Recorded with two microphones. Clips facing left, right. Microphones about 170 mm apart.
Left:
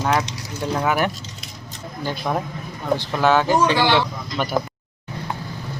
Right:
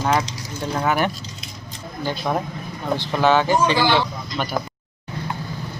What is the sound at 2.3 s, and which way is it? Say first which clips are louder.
Speech: even; 5° right (ahead or behind).